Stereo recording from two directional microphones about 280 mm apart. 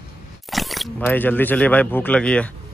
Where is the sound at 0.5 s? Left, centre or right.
Centre.